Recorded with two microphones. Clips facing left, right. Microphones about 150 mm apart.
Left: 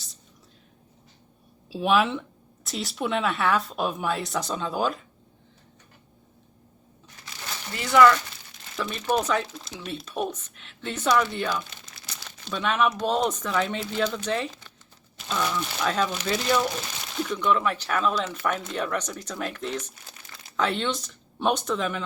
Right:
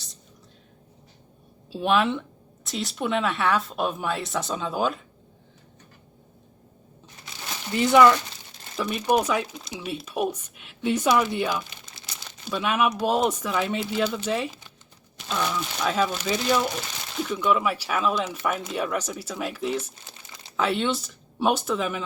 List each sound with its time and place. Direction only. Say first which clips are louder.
1.7 s speech: even; centre (ahead or behind)
7.8 s speech: right 1 dB; 20° right (ahead or behind)
11.9 s crumpling: even; 25° right (ahead or behind)
12.5 s speech: right 1 dB; 10° right (ahead or behind)